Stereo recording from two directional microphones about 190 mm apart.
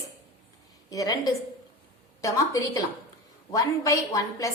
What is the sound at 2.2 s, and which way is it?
A woman's voice, 15° left (ahead or behind).